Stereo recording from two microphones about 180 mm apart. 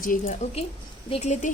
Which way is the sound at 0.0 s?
50° left (ahead or behind).